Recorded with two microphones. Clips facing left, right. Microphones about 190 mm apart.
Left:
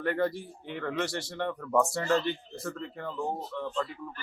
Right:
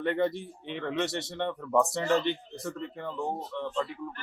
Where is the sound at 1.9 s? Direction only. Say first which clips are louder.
Right 1 dB; 20° right (ahead or behind).